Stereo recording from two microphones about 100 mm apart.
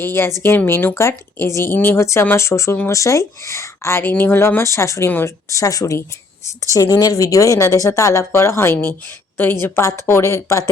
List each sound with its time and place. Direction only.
0.0 s speech: 25° left (ahead or behind)